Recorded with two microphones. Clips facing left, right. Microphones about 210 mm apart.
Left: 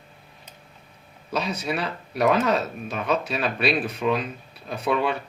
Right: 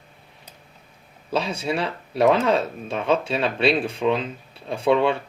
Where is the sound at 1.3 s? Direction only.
30° right (ahead or behind).